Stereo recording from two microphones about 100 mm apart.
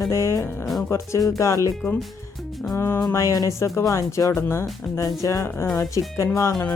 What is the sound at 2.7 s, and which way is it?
Speech, 25° left (ahead or behind).